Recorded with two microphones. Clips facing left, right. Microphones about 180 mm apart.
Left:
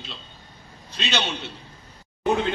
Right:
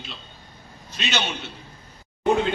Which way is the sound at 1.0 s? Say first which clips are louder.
Even; 30° left (ahead or behind).